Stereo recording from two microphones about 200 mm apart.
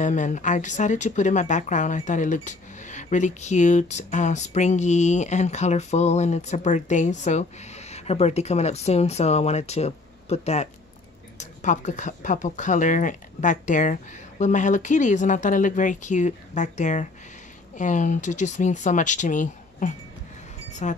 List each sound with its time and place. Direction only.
0.0 s speech: 40° left (ahead or behind)